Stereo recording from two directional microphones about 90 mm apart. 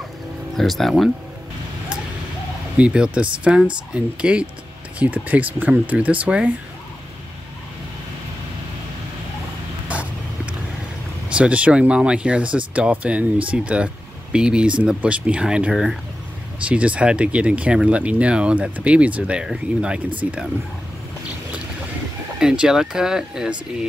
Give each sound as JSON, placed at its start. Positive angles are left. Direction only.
{"t": 0.6, "sound": "speech", "side_deg": 5}
{"t": 2.8, "sound": "speech", "side_deg": -10}
{"t": 9.8, "sound": "vehicle", "side_deg": -15}
{"t": 11.2, "sound": "speech", "side_deg": -15}
{"t": 16.6, "sound": "speech", "side_deg": -15}
{"t": 22.4, "sound": "speech", "side_deg": -10}